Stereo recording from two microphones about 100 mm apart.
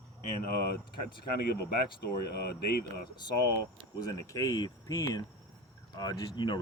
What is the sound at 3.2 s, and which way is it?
Speech, 45° left (ahead or behind).